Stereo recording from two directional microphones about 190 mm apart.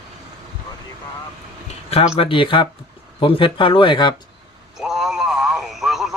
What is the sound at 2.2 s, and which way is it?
Speech, 25° left (ahead or behind).